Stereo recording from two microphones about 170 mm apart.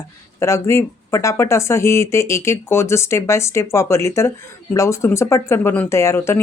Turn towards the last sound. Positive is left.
turn(degrees=15)  # may be behind; listen again after turning